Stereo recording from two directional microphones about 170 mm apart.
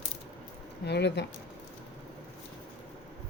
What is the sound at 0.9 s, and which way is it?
Speech, 85° left.